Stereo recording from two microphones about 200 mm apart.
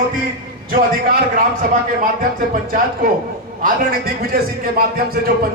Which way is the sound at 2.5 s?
45° right (ahead or behind).